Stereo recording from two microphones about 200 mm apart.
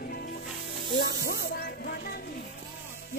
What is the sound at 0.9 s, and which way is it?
Speech, 50° left (ahead or behind).